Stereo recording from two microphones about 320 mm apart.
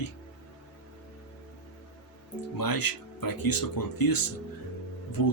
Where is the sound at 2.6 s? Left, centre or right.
Left.